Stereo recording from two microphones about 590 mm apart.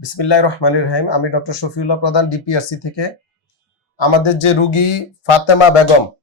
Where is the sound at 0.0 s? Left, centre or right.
Left.